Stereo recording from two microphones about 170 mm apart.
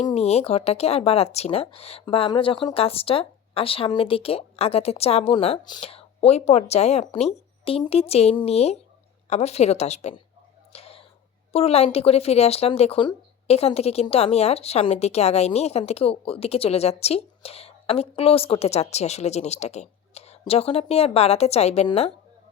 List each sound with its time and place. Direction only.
0.1 s speech: 40° left (ahead or behind)
10.7 s throat clearing: 35° left (ahead or behind)
11.5 s speech: 35° left (ahead or behind)